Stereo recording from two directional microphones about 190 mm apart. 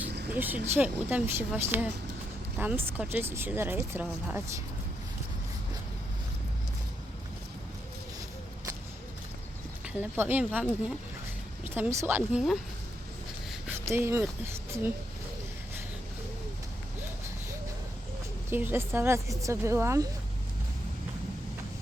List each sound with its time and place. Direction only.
0.3 s speech: 10° right (ahead or behind)
9.8 s speech: 10° right (ahead or behind)
18.5 s speech: 10° right (ahead or behind)